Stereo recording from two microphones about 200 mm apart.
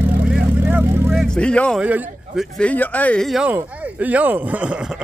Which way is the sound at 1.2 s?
5° left (ahead or behind).